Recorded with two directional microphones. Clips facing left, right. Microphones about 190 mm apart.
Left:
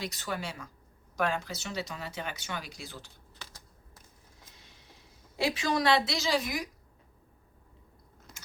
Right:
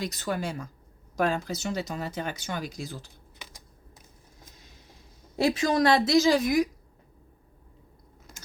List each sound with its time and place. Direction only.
0.0 s speech: 45° right (ahead or behind)
3.3 s a sound: 15° right (ahead or behind)
5.4 s speech: 45° right (ahead or behind)